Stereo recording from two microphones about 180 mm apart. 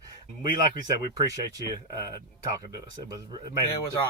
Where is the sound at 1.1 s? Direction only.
20° right (ahead or behind).